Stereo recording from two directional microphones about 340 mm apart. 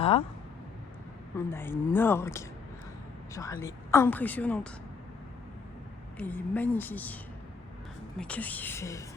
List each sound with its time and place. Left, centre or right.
0.0 s speech: centre
1.4 s a woman's voice: centre
6.1 s a woman's voice: centre
8.2 s a woman's voice: centre